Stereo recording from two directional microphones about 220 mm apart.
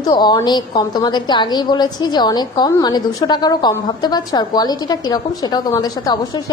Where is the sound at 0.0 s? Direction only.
20° left (ahead or behind).